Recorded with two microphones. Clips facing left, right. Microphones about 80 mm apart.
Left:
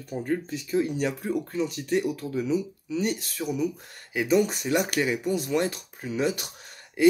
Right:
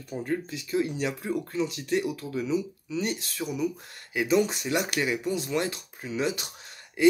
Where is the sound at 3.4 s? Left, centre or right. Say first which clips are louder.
Left 3 dB; centre.